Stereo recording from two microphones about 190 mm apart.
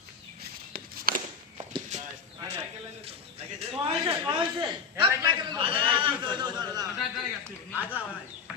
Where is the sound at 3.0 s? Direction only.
30° right (ahead or behind).